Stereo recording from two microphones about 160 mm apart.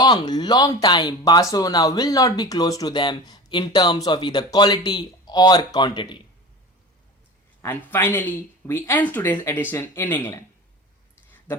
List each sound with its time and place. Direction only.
0.0 s speech: 25° left (ahead or behind)
7.6 s speech: 10° left (ahead or behind)